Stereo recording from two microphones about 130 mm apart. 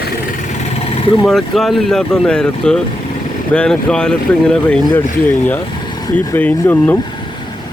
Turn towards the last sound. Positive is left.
turn(degrees=15)  # may be behind; listen again after turning